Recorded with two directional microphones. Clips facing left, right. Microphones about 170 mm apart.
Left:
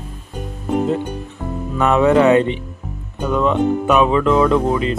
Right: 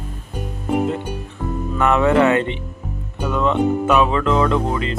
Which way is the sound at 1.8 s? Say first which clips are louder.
Left 2 dB; 15° left (ahead or behind).